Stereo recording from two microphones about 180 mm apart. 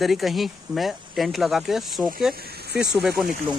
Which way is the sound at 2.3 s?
60° right (ahead or behind).